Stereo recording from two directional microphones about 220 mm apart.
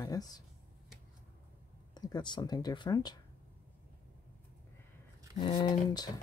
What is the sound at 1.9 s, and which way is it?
Speech, 20° left (ahead or behind).